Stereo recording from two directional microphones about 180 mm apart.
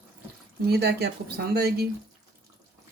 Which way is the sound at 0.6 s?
60° right (ahead or behind).